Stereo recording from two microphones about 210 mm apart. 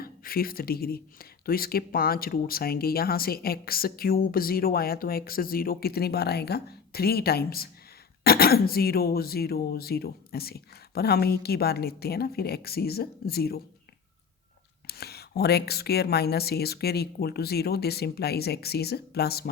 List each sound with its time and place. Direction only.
0.0 s speech: 45° left (ahead or behind)
14.8 s speech: 50° left (ahead or behind)